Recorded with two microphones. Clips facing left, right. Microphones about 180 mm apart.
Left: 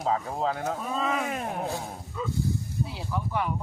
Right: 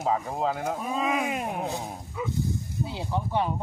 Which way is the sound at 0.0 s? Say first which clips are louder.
Right 1 dB; 5° right (ahead or behind).